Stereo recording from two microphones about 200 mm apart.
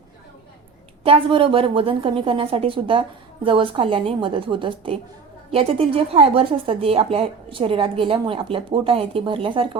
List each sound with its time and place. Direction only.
1.0 s a woman's voice: 25° right (ahead or behind)